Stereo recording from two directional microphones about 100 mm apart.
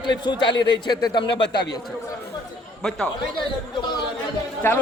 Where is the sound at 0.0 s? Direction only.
50° left (ahead or behind).